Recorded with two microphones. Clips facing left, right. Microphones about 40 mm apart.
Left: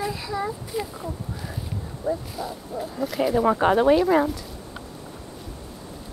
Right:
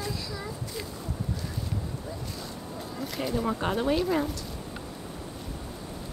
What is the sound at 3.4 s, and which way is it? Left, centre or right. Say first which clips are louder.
Speech: left 10 dB; left.